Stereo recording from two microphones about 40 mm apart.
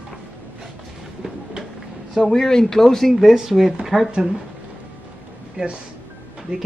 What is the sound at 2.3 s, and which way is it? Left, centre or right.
Speech, centre.